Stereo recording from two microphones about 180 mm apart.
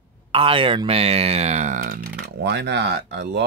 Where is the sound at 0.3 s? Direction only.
30° right (ahead or behind).